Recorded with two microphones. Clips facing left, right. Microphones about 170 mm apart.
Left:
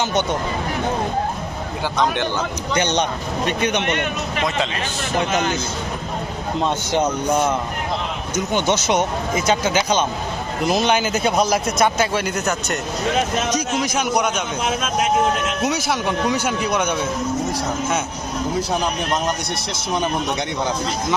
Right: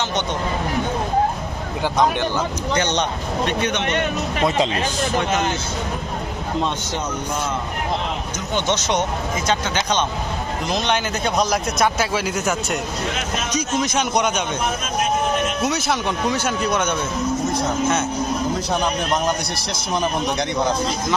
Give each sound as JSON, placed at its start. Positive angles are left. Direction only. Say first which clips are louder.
{"t": 2.7, "sound": "speech", "louder": "left 2 dB", "side_deg": 10}
{"t": 3.9, "sound": "speech", "louder": "right 2 dB", "side_deg": -35}
{"t": 8.5, "sound": "a man's voice", "louder": "left 2 dB", "side_deg": 10}
{"t": 13.8, "sound": "speech", "louder": "even", "side_deg": 10}
{"t": 14.6, "sound": "speech", "louder": "left 2 dB", "side_deg": 90}
{"t": 15.6, "sound": "speech", "louder": "even", "side_deg": 10}